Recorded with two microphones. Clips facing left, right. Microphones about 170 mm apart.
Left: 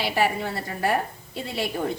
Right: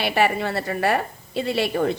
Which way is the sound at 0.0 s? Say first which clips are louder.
Right 3 dB; 70° right (ahead or behind).